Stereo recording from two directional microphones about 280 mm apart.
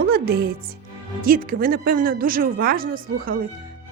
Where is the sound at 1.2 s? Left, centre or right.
Right.